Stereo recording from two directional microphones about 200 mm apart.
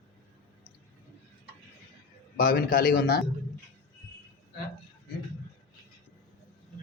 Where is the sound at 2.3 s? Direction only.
50° left (ahead or behind).